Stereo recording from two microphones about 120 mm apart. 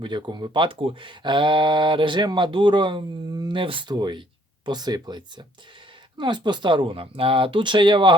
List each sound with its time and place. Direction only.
0.0 s speech: 40° right (ahead or behind)
3.5 s speech: 45° right (ahead or behind)